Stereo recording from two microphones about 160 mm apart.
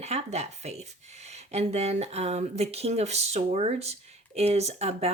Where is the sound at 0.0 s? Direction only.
45° right (ahead or behind).